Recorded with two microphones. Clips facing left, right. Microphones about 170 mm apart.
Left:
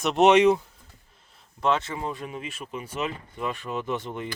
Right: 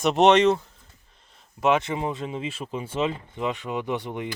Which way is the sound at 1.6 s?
15° right (ahead or behind).